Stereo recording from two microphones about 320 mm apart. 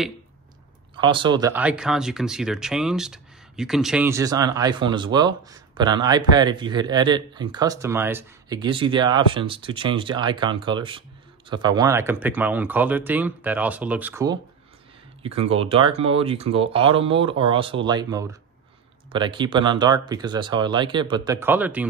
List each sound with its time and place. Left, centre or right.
0.9 s speech: centre